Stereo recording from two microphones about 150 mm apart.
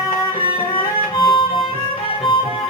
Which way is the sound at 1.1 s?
35° left (ahead or behind).